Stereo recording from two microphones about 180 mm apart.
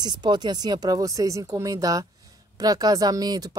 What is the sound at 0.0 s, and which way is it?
Speech, 25° right (ahead or behind).